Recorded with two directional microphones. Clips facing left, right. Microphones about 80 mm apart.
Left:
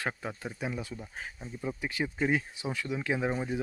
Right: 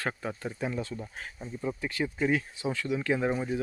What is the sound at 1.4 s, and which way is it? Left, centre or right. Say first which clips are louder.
Speech: right 3 dB; centre.